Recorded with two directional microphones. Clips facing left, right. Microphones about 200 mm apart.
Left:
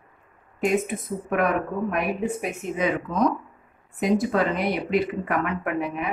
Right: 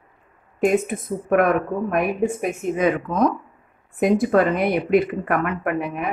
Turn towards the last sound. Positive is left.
turn(degrees=-50)  # may be behind; listen again after turning